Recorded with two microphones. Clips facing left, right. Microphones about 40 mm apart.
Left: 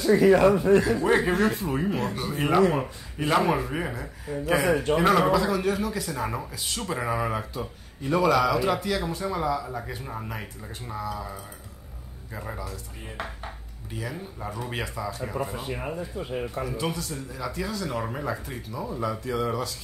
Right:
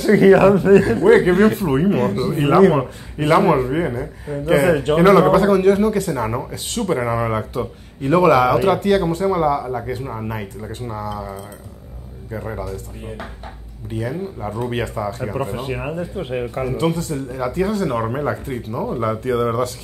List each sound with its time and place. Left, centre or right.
0.0 s speech: right
0.7 s speech: right
3.6 s speech: centre
4.6 s speech: right
6.1 s speech: right
7.5 s speech: right
10.0 s speech: centre
10.9 s speech: right
12.3 s a man's voice: centre
13.9 s speech: right
14.7 s speech: right
16.0 s speech: right